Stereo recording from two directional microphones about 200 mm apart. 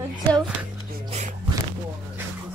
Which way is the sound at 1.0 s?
35° right (ahead or behind).